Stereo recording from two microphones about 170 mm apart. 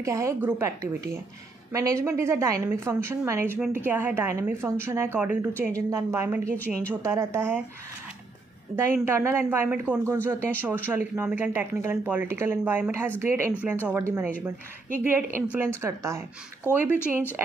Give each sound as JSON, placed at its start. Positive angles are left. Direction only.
{"t": 0.0, "sound": "a woman's voice", "side_deg": -15}
{"t": 8.7, "sound": "a woman's voice", "side_deg": -15}